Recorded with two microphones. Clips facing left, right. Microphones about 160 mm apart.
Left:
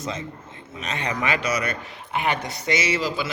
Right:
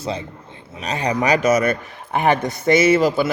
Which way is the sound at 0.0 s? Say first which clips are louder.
Right 4 dB; 35° right (ahead or behind).